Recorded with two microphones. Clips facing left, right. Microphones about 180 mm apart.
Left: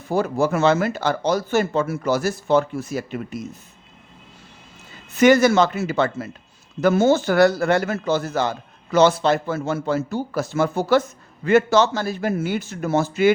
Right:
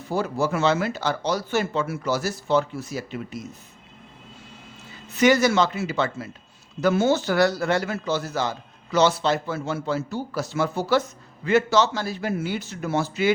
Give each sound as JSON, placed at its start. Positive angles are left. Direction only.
{"t": 0.1, "sound": "speech", "side_deg": 50}
{"t": 5.1, "sound": "speech", "side_deg": 55}